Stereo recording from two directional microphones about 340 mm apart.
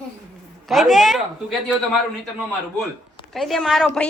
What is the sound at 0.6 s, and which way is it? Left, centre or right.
Speech, centre.